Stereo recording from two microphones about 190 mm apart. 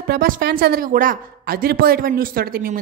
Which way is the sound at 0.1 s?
50° right (ahead or behind).